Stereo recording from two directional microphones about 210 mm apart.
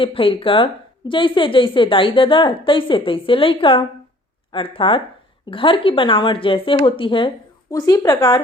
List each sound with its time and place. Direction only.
0.0 s a woman's voice: 25° left (ahead or behind)